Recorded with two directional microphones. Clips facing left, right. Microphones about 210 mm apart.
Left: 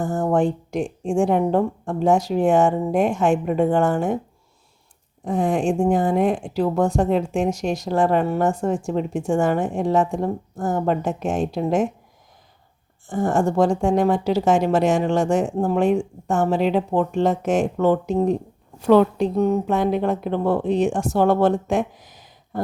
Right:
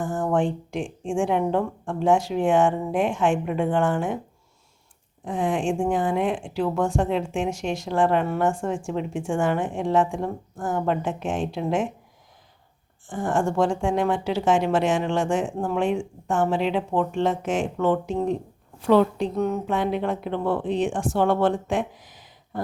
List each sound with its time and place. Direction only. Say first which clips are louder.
0.0 s a woman's voice: left 3 dB; 40° left (ahead or behind)
5.2 s a woman's voice: left 4 dB; 40° left (ahead or behind)
13.1 s a woman's voice: left 4 dB; 40° left (ahead or behind)